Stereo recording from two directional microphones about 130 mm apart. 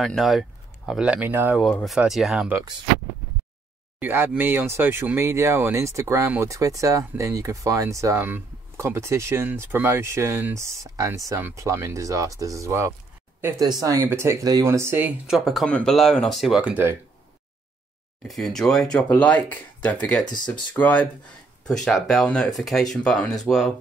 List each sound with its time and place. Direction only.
0.0 s speech: centre (ahead or behind); by 1.6 s 15° right (ahead or behind)
1.6 s speech: centre (ahead or behind)
4.0 s speech: 15° right (ahead or behind)
15.2 s speech: centre (ahead or behind)
18.2 s speech: centre (ahead or behind)